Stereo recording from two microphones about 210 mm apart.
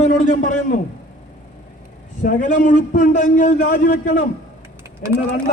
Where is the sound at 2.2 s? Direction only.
40° left (ahead or behind).